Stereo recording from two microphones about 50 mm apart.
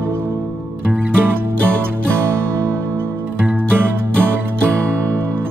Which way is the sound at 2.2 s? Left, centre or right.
Right.